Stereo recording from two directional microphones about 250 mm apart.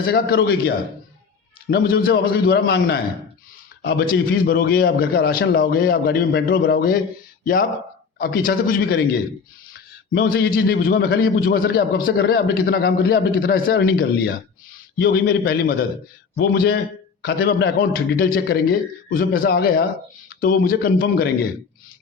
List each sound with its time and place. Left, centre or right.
0.0 s a man's voice: left
1.7 s a man's voice: left
10.1 s a man's voice: left